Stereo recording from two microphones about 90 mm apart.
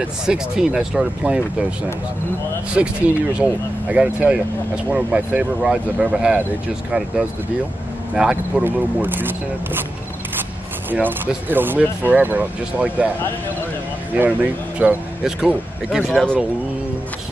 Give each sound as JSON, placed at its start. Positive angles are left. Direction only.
{"t": 0.3, "sound": "speech", "side_deg": -10}
{"t": 2.7, "sound": "speech", "side_deg": -10}
{"t": 8.1, "sound": "speech", "side_deg": -10}
{"t": 8.6, "sound": "speech", "side_deg": -20}
{"t": 10.9, "sound": "speech", "side_deg": -20}
{"t": 14.8, "sound": "speech", "side_deg": -15}
{"t": 15.2, "sound": "speech", "side_deg": -5}